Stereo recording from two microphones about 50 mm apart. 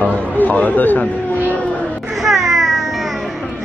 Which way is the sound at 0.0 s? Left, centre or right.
Left.